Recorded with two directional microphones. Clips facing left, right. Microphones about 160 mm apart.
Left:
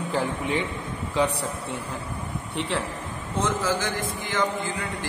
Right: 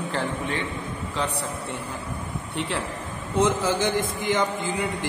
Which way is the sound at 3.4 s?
20° right (ahead or behind).